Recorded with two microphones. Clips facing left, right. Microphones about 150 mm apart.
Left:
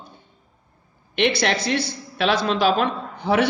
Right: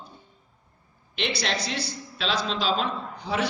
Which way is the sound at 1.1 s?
60° left (ahead or behind).